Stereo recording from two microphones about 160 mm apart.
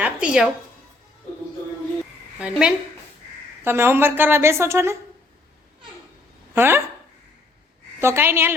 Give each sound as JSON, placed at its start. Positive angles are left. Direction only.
{"t": 0.0, "sound": "a woman's voice", "side_deg": -5}
{"t": 2.4, "sound": "a woman's voice", "side_deg": -5}
{"t": 6.5, "sound": "speech", "side_deg": -15}
{"t": 7.9, "sound": "a woman's voice", "side_deg": -15}